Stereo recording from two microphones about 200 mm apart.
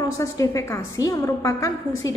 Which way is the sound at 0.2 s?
15° left (ahead or behind).